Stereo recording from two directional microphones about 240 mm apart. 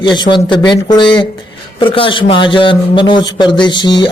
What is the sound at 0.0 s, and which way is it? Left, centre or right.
A man's voice, centre.